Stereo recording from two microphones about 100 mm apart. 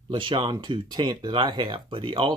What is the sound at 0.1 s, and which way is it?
Speech, 55° right (ahead or behind).